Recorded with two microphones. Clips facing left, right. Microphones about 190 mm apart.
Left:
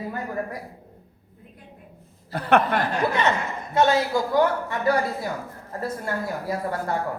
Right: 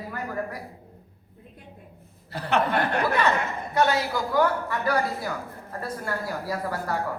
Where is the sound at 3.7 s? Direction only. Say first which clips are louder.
Left 4 dB; 25° left (ahead or behind).